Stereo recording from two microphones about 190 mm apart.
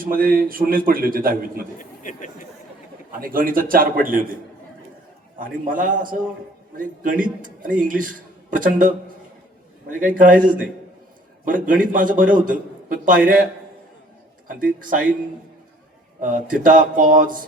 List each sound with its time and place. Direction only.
0.0 s a man's voice: 50° right (ahead or behind)
1.8 s a sound: 40° left (ahead or behind)
3.1 s a man's voice: 50° right (ahead or behind)
5.4 s a man's voice: 45° right (ahead or behind)
10.0 s a man's voice: 45° right (ahead or behind)
14.8 s a man's voice: 45° right (ahead or behind)
16.2 s a man's voice: 45° right (ahead or behind)